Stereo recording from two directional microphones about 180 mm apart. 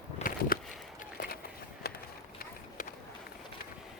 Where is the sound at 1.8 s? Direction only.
60° left (ahead or behind).